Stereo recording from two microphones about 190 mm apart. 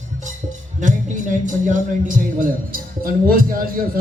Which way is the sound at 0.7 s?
40° right (ahead or behind).